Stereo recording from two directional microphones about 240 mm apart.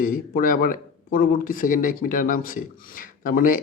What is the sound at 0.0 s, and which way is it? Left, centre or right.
Speech, left.